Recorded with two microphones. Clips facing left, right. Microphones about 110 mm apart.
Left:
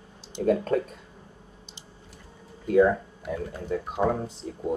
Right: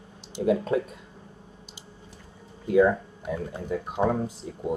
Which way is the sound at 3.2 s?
20° right (ahead or behind).